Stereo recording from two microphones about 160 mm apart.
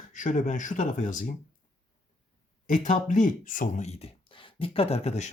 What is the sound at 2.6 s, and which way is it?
Speech, 50° left (ahead or behind).